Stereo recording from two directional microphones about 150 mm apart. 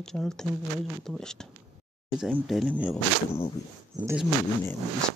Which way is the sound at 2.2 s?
5° right (ahead or behind).